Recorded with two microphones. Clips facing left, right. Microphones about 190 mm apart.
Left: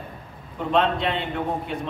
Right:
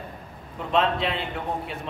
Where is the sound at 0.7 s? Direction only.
Centre (ahead or behind).